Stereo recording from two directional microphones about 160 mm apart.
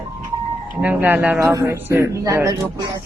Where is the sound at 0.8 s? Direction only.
10° right (ahead or behind).